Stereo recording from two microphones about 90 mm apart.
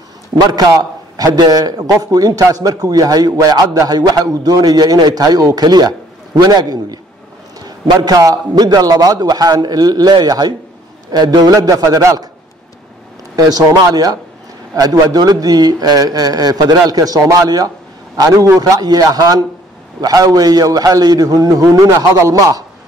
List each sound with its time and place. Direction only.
0.5 s a man's voice: 45° right (ahead or behind)
13.5 s a man's voice: 40° right (ahead or behind)